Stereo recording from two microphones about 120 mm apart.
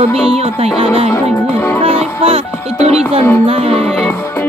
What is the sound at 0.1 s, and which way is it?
Speech, 55° right (ahead or behind).